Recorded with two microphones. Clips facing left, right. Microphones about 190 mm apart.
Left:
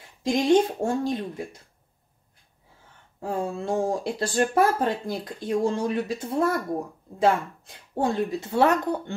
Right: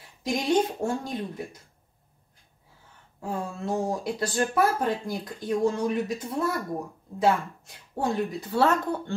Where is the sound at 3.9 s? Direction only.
30° left (ahead or behind).